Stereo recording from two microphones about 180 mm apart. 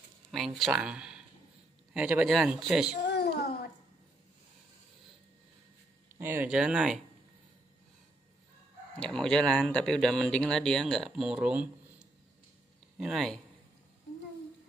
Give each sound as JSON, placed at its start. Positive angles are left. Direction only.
{"t": 0.3, "sound": "speech", "side_deg": 0}
{"t": 3.1, "sound": "a sound", "side_deg": 65}
{"t": 6.1, "sound": "speech", "side_deg": -10}
{"t": 9.0, "sound": "speech", "side_deg": 5}